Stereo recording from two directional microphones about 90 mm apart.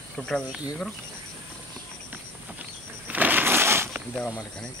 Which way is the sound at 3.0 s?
20° right (ahead or behind).